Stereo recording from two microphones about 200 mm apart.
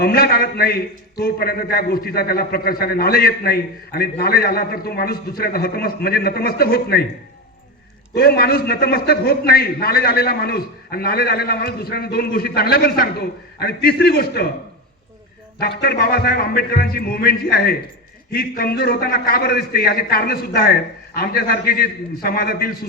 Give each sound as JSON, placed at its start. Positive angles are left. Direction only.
{"t": 0.0, "sound": "a man's voice", "side_deg": 50}
{"t": 8.1, "sound": "a man's voice", "side_deg": 50}
{"t": 15.5, "sound": "a man's voice", "side_deg": 50}